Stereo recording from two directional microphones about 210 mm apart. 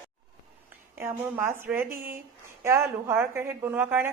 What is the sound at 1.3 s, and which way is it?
A woman's voice, 10° right (ahead or behind).